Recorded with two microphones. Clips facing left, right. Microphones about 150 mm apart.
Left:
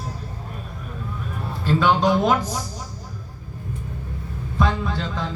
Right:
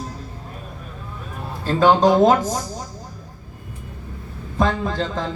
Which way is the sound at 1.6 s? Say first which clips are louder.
Right 4 dB; 40° right (ahead or behind).